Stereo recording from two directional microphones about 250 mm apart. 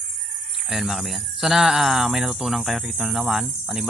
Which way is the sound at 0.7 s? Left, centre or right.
Centre.